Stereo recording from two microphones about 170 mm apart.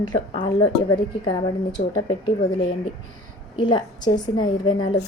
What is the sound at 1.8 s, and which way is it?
Speech, 45° left (ahead or behind).